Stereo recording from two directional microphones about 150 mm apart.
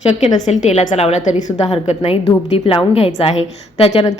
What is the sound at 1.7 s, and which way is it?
Speech, 30° left (ahead or behind).